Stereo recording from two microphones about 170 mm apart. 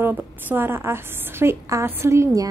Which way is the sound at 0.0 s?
10° right (ahead or behind).